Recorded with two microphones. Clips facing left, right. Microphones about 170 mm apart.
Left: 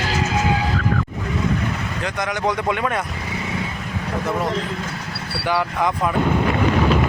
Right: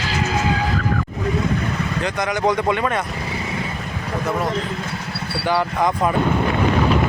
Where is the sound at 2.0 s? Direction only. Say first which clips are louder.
Right 2 dB; centre (ahead or behind).